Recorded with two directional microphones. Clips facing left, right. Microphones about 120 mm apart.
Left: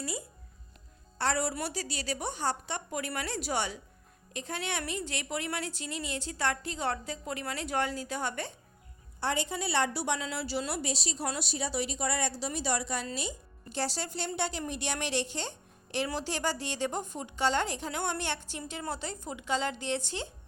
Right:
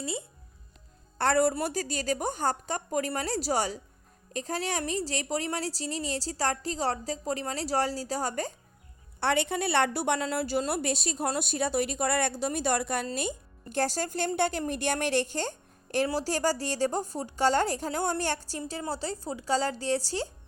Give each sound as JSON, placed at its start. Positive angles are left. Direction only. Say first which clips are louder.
{"t": 0.0, "sound": "speech", "louder": "right 3 dB", "side_deg": -25}
{"t": 1.2, "sound": "a woman's voice", "louder": "right 6 dB", "side_deg": -50}
{"t": 9.2, "sound": "a woman's voice", "louder": "right 5 dB", "side_deg": -65}